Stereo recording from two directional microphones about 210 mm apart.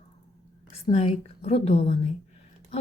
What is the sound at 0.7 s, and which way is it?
A woman's voice, 30° left (ahead or behind).